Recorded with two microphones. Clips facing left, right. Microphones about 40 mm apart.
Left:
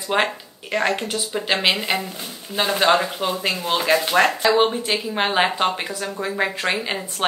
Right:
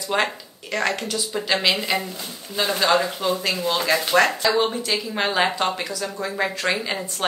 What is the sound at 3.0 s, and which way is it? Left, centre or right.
Speech, left.